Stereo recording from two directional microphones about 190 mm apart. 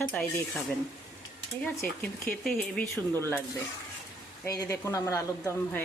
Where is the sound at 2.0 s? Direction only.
5° left (ahead or behind).